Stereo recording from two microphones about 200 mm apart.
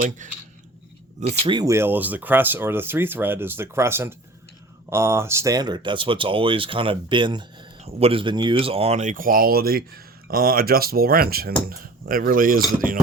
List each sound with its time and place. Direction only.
0.2 s speech: 40° right (ahead or behind)
1.5 s speech: 20° right (ahead or behind); by 12.6 s 45° right (ahead or behind)